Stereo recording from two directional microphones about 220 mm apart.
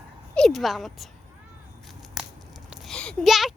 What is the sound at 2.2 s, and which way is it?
Tearing, centre (ahead or behind).